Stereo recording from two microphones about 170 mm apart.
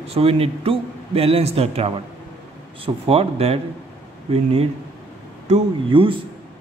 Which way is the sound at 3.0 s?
35° right (ahead or behind).